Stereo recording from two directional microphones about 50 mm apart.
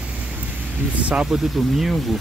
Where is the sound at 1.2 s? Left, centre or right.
Centre.